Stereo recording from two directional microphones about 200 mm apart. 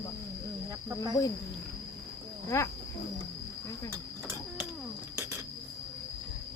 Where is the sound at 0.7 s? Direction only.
15° right (ahead or behind).